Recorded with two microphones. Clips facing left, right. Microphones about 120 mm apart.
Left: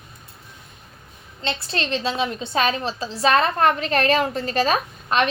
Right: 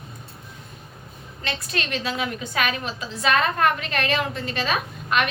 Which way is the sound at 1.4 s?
30° left (ahead or behind).